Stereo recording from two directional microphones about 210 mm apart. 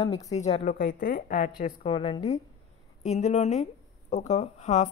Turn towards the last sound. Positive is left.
turn(degrees=35)  # may be behind; listen again after turning